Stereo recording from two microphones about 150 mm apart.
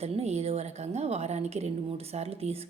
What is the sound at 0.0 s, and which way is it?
A woman's voice, 45° right (ahead or behind).